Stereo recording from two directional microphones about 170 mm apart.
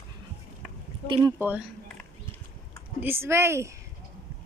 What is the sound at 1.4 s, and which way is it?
Speech, 10° right (ahead or behind).